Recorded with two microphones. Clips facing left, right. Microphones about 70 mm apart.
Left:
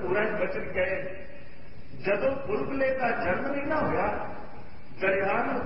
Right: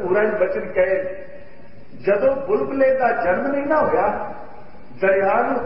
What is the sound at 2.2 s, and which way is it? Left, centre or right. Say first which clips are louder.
Speech: right 10 dB; right.